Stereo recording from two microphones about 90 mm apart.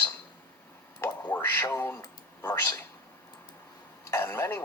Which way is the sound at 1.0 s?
20° left (ahead or behind).